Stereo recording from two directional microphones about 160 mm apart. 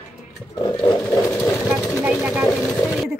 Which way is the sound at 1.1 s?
15° left (ahead or behind).